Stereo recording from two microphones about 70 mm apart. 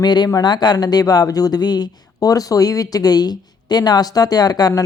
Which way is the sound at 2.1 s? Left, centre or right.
Left.